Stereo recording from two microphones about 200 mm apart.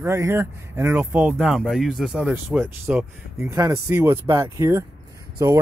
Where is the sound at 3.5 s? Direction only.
15° right (ahead or behind).